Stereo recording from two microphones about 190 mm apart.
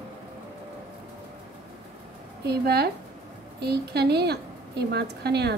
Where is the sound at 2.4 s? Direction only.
60° right (ahead or behind).